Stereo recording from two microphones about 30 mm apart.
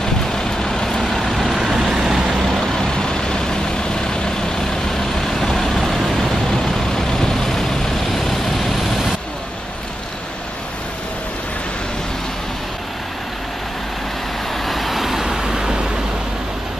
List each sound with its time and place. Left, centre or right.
0.0 s vehicle: centre
1.6 s vehicle: centre
2.7 s vehicle: left; by 6.3 s centre
7.1 s vehicle: centre
14.6 s vehicle: centre
15.2 s vehicle: centre